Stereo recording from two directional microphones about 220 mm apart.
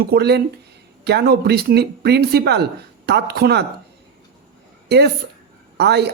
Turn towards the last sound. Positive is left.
turn(degrees=-50)  # may be behind; listen again after turning